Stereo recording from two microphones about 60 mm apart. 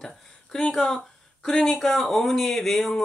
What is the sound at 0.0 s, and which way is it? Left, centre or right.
Speech, centre.